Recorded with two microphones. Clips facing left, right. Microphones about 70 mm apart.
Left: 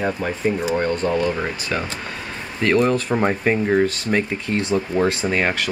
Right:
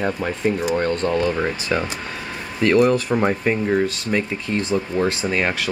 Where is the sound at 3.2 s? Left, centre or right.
Centre.